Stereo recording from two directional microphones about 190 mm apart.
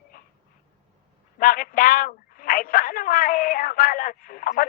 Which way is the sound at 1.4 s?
50° left (ahead or behind).